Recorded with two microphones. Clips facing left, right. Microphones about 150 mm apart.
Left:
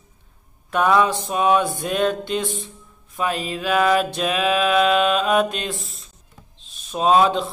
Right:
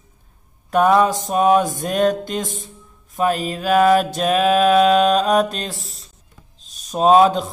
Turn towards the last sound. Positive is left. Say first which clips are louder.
# right 4 dB
turn(degrees=-40)  # may be behind; listen again after turning